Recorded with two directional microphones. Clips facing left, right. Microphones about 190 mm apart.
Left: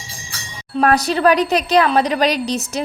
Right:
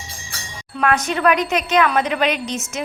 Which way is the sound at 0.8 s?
35° left (ahead or behind).